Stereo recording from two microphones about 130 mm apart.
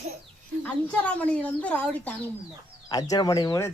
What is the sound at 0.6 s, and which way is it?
A child's voice, 10° left (ahead or behind).